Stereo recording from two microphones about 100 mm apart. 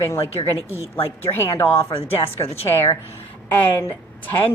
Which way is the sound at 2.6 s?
25° left (ahead or behind).